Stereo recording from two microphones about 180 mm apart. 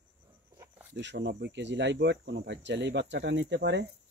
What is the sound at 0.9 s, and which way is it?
Speech, 75° right (ahead or behind).